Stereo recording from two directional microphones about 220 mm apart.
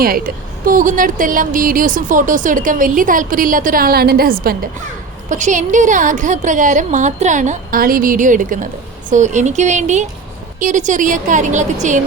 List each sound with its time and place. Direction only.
0.6 s a woman's voice: 40° right (ahead or behind)